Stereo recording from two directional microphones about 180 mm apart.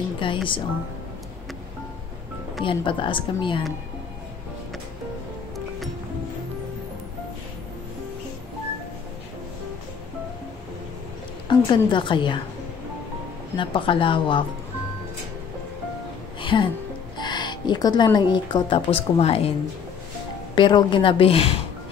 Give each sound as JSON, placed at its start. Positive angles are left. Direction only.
{"t": 0.2, "sound": "a woman's voice", "side_deg": 30}
{"t": 2.6, "sound": "a woman's voice", "side_deg": 30}
{"t": 11.4, "sound": "a woman's voice", "side_deg": 25}
{"t": 13.6, "sound": "a woman's voice", "side_deg": 30}
{"t": 16.3, "sound": "music", "side_deg": 25}
{"t": 17.2, "sound": "speech", "side_deg": 25}
{"t": 20.5, "sound": "a woman's voice", "side_deg": 25}